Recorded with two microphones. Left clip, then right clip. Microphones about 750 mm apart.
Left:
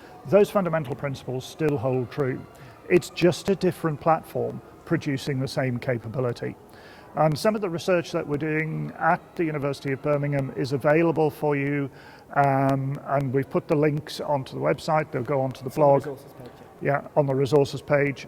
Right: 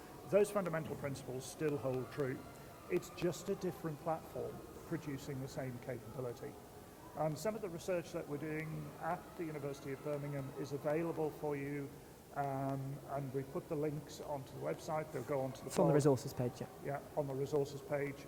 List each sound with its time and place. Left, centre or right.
0.3 s speech: left
16.8 s speech: left